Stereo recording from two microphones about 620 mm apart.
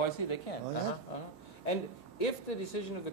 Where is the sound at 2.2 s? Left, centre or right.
Left.